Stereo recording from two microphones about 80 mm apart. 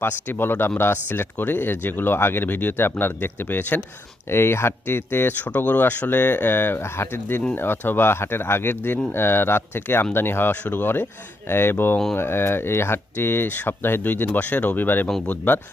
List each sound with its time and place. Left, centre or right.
0.0 s speech: left